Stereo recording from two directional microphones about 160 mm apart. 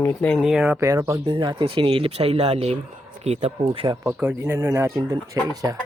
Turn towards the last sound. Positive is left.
turn(degrees=-20)  # may be behind; listen again after turning